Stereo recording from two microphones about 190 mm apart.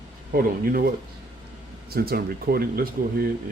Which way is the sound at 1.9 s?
55° right (ahead or behind).